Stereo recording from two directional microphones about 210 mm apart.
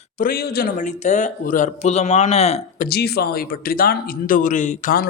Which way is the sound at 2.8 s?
50° left (ahead or behind).